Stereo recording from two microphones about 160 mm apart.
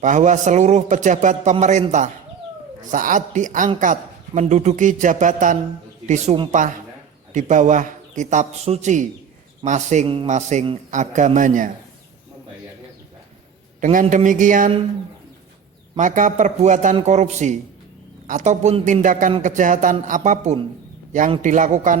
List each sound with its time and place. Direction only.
0.0 s a man's voice: 50° right (ahead or behind)
13.8 s a man's voice: 50° right (ahead or behind)
16.0 s a man's voice: 50° right (ahead or behind)